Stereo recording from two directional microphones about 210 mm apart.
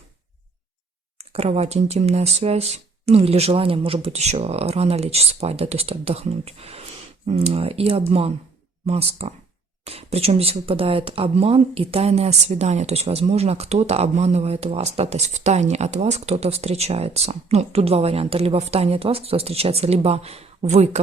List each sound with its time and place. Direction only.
1.2 s speech: 30° right (ahead or behind)